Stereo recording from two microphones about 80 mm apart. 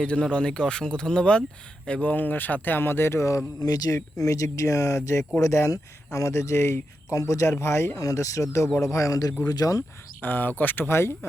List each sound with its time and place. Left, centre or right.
0.0 s speech: centre; by 3.4 s left
3.6 s speech: left
10.2 s speech: left